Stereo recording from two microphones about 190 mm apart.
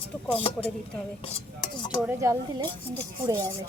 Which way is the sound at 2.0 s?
10° right (ahead or behind).